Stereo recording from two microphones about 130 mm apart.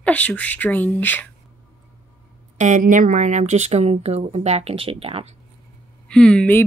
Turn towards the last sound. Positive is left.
turn(degrees=10)  # may be behind; listen again after turning